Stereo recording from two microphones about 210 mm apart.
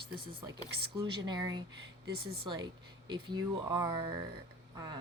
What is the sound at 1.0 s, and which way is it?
Speech, 20° right (ahead or behind).